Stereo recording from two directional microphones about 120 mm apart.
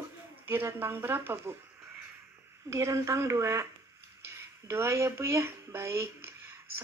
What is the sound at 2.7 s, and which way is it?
Speech, 25° right (ahead or behind).